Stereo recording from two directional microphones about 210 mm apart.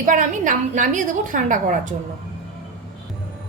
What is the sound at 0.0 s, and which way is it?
A woman's voice, 40° right (ahead or behind).